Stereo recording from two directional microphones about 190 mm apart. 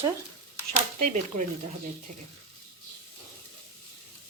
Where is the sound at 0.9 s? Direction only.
40° right (ahead or behind).